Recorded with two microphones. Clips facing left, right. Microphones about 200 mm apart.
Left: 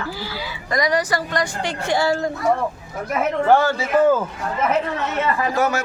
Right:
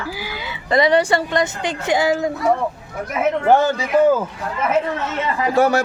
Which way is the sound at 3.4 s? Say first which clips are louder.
Even; 15° right (ahead or behind).